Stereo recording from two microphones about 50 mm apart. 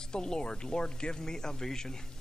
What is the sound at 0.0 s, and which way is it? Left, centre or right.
A man's voice, centre.